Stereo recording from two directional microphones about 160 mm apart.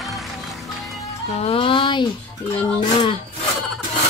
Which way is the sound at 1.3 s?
40° left (ahead or behind).